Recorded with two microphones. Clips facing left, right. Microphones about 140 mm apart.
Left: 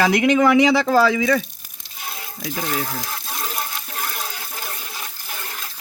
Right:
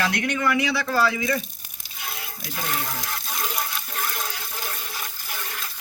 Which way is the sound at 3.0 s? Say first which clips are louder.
Left 1 dB; 30° left (ahead or behind).